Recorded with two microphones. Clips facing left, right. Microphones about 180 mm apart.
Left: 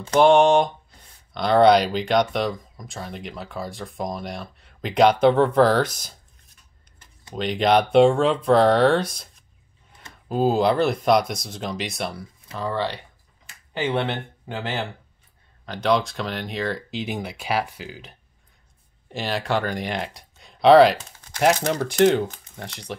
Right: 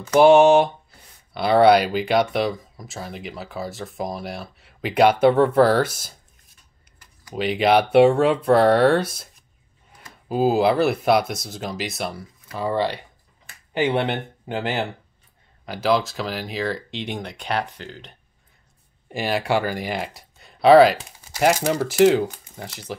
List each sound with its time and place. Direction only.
0.1 s speech: 5° right (ahead or behind)
7.3 s speech: 5° right (ahead or behind)
12.5 s speech: 10° right (ahead or behind); by 18.1 s 5° left (ahead or behind)
19.0 s speech: 10° right (ahead or behind)